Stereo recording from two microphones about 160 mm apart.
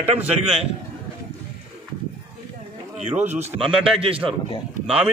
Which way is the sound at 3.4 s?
45° right (ahead or behind).